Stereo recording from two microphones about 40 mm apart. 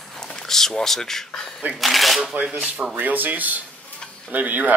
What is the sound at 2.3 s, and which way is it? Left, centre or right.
Speech, right.